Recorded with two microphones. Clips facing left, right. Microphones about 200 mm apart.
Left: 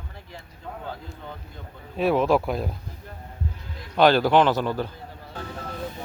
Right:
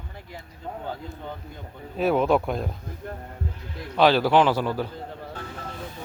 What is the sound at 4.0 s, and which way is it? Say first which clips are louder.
Speech: left 1 dB; centre (ahead or behind).